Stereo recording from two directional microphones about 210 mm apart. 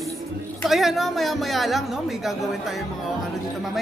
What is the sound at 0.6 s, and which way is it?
A woman's voice, centre (ahead or behind).